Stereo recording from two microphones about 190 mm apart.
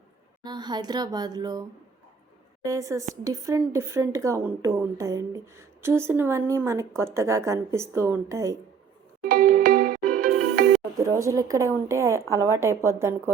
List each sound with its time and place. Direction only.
0.4 s speech: 20° right (ahead or behind)
2.6 s speech: 15° right (ahead or behind)
9.2 s music: 45° right (ahead or behind)
10.9 s speech: 15° right (ahead or behind)